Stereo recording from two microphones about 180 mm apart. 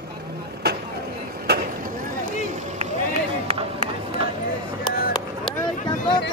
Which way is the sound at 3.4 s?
35° right (ahead or behind).